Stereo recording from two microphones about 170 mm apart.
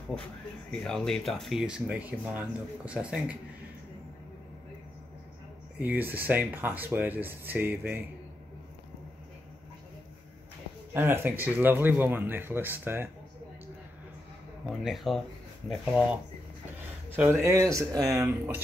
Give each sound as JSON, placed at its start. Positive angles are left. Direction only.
{"t": 0.7, "sound": "speech", "side_deg": 5}
{"t": 5.8, "sound": "speech", "side_deg": -10}
{"t": 10.9, "sound": "speech", "side_deg": -10}
{"t": 14.7, "sound": "speech", "side_deg": 0}
{"t": 18.1, "sound": "speech", "side_deg": -5}